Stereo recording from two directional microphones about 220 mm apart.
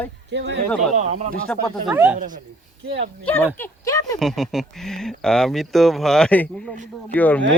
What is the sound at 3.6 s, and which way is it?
Speech, 15° left (ahead or behind).